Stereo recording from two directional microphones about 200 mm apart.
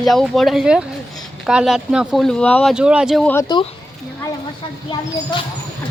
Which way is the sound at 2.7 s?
5° right (ahead or behind).